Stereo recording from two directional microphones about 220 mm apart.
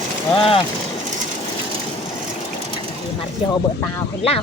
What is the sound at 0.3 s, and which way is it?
Speech, 25° left (ahead or behind).